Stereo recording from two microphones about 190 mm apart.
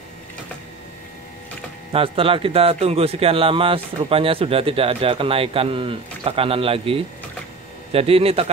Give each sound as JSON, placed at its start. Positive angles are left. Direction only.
{"t": 1.9, "sound": "a man's voice", "side_deg": -30}